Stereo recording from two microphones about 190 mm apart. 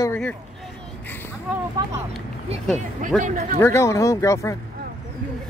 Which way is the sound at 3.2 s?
40° right (ahead or behind).